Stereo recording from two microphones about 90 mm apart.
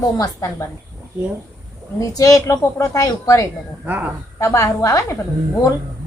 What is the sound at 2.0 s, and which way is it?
Speech, 40° left (ahead or behind).